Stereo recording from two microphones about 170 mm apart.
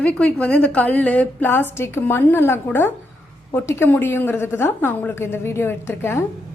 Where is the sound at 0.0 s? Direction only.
5° left (ahead or behind).